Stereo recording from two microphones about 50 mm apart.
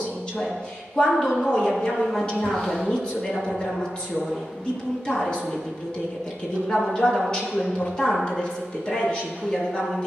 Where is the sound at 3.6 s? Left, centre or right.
Centre.